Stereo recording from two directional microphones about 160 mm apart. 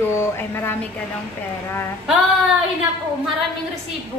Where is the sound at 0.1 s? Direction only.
15° left (ahead or behind).